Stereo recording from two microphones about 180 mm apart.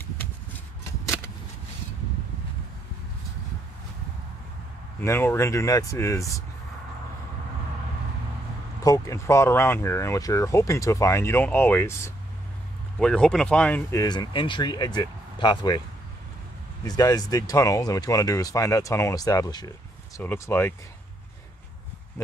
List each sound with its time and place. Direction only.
1.0 s a sound: 15° left (ahead or behind)
5.0 s speech: 15° left (ahead or behind)
8.8 s speech: 20° left (ahead or behind)
13.0 s speech: 5° left (ahead or behind)
14.0 s speech: 25° left (ahead or behind)
16.8 s speech: 20° left (ahead or behind)